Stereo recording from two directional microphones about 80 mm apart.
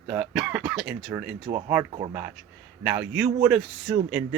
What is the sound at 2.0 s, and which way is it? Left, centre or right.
Speech, right.